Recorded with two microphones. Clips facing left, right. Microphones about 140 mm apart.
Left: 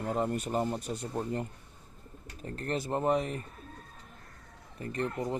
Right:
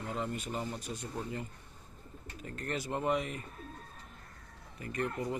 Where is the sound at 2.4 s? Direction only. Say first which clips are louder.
Left 4 dB; 35° left (ahead or behind).